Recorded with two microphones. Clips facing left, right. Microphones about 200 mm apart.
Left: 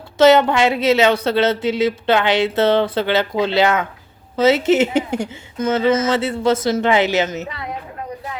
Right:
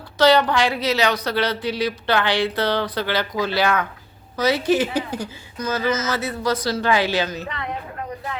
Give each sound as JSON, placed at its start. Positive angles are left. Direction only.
{"t": 0.2, "sound": "speech", "side_deg": 25}
{"t": 7.4, "sound": "a woman's voice", "side_deg": 10}